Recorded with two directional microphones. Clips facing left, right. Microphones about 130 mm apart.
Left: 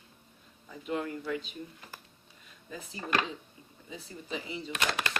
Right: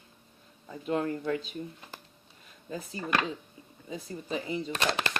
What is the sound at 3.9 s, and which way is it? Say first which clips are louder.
Speech: right 5 dB; 40° right (ahead or behind).